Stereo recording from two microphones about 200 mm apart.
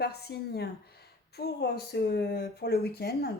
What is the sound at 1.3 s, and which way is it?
Speech, 55° left (ahead or behind).